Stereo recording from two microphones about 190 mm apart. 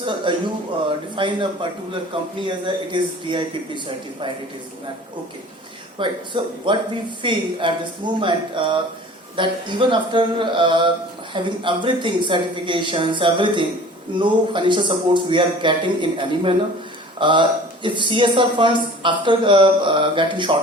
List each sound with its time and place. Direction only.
0.0 s speech: 25° right (ahead or behind)
6.0 s speech: 25° right (ahead or behind)